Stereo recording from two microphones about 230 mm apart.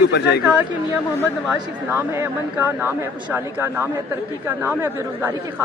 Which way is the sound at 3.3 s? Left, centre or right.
Centre.